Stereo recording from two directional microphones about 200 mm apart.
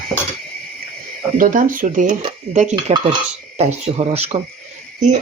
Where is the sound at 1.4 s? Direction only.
45° right (ahead or behind).